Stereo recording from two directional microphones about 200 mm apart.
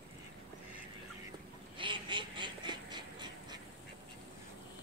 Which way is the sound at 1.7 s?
25° right (ahead or behind).